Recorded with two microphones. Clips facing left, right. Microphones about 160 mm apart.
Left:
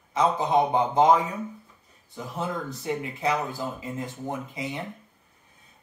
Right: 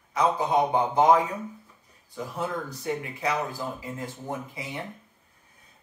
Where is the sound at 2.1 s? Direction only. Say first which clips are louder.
Even; 20° left (ahead or behind).